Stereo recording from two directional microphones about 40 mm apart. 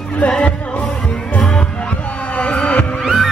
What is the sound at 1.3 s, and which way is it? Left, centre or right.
Heart sounds, left.